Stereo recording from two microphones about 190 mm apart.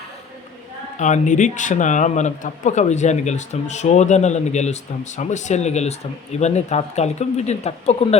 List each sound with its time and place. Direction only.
0.9 s a man's voice: 40° left (ahead or behind)